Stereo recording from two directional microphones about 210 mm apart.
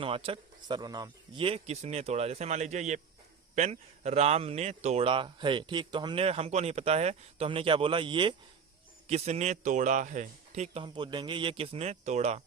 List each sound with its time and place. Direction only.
0.0 s speech: 25° right (ahead or behind)